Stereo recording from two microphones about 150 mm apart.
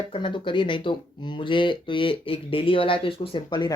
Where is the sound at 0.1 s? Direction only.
35° left (ahead or behind).